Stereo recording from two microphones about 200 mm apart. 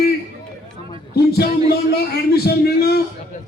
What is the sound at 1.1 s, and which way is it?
Speech, 50° left (ahead or behind).